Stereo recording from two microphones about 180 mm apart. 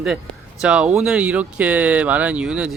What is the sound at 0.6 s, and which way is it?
A man's voice, 5° right (ahead or behind).